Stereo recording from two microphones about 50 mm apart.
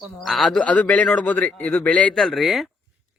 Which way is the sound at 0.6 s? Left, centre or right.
Left.